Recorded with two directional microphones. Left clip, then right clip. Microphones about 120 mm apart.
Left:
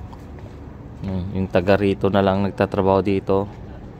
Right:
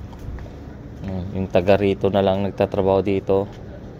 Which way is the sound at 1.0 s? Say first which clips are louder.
Left 1 dB; 50° left (ahead or behind).